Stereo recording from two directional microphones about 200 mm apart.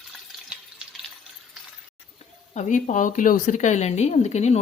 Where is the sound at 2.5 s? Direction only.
40° left (ahead or behind).